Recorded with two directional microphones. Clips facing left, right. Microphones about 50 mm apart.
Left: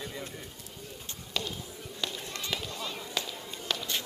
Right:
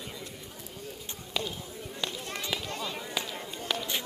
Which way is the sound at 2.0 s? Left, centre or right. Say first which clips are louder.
Right 1 dB; centre.